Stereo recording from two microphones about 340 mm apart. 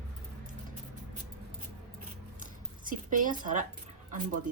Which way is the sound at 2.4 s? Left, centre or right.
Right.